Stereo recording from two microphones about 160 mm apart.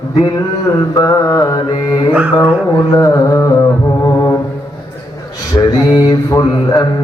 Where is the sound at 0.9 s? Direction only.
20° left (ahead or behind).